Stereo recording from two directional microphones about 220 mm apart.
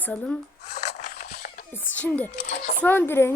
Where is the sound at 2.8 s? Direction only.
10° left (ahead or behind).